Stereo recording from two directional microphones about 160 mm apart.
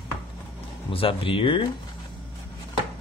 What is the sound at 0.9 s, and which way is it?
Speech, 35° left (ahead or behind).